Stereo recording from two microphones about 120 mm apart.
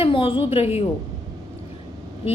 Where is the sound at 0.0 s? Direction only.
50° left (ahead or behind).